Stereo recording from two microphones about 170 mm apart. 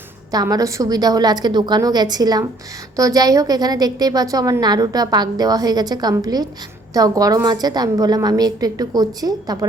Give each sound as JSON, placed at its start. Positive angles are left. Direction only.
{"t": 0.3, "sound": "a woman's voice", "side_deg": -20}